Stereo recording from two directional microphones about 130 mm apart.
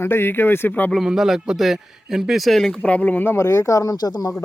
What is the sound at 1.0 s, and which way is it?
A man's voice, 5° right (ahead or behind).